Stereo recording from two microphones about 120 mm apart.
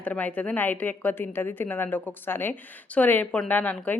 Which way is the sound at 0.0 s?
15° left (ahead or behind).